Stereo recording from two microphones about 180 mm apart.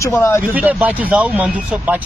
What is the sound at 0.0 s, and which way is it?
Speech, 15° left (ahead or behind).